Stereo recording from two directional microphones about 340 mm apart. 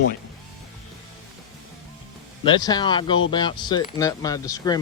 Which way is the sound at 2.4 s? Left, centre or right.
Centre.